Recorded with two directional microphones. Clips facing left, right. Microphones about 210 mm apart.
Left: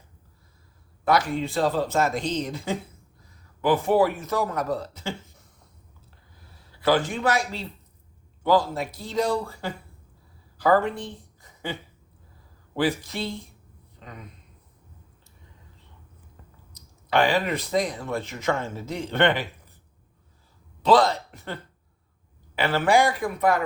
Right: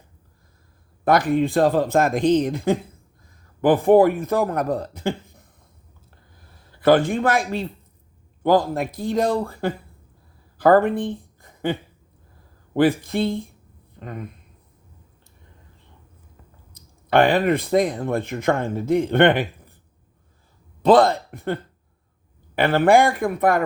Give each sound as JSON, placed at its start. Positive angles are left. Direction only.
{"t": 1.0, "sound": "speech", "side_deg": -55}
{"t": 6.5, "sound": "a man's voice", "side_deg": -50}
{"t": 16.7, "sound": "speech", "side_deg": -55}
{"t": 20.8, "sound": "a man's voice", "side_deg": -55}